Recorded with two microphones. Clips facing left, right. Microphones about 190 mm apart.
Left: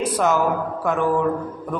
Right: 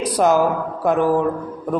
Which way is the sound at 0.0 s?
40° right (ahead or behind).